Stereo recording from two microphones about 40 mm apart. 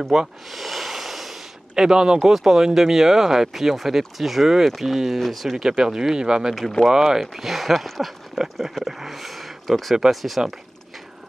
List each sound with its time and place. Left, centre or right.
0.0 s speech: centre
0.5 s a sound: centre
1.8 s speech: centre
5.6 s speech: centre
10.4 s speech: centre